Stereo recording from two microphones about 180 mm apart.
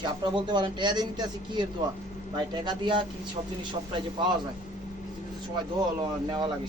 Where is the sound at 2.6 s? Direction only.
25° right (ahead or behind).